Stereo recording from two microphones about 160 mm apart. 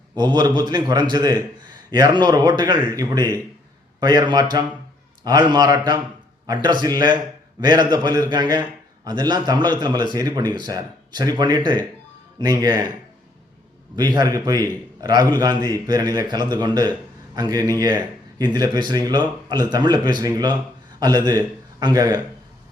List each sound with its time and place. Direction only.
0.2 s speech: 25° right (ahead or behind)
13.9 s a man's voice: 25° right (ahead or behind)